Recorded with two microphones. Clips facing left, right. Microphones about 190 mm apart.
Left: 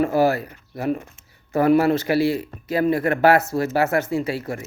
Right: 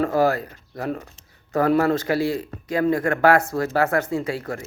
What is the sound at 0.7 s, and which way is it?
Speech, 15° left (ahead or behind).